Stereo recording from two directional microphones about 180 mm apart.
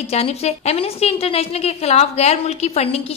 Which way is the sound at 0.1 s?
35° left (ahead or behind).